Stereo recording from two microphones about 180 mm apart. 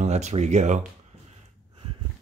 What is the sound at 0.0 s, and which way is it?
Speech, 40° right (ahead or behind).